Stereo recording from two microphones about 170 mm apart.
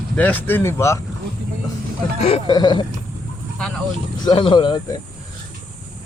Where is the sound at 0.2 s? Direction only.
10° left (ahead or behind).